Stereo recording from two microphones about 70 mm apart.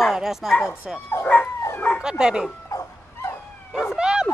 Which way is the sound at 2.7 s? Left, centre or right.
Left.